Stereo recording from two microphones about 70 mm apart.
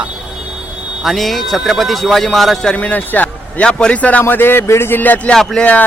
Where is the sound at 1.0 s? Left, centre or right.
Centre.